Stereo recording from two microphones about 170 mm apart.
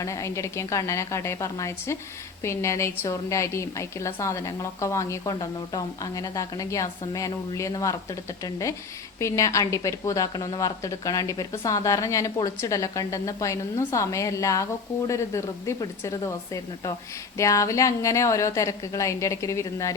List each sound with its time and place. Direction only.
0.0 s a woman's voice: 20° left (ahead or behind)